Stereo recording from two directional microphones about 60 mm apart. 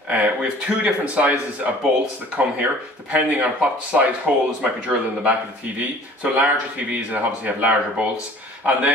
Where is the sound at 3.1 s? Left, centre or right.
Right.